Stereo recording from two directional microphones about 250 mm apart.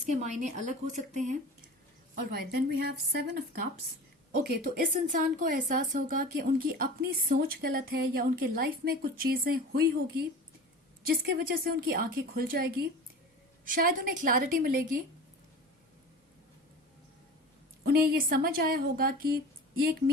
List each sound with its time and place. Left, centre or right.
0.1 s speech: right
2.3 s a woman's voice: right
17.8 s a woman's voice: right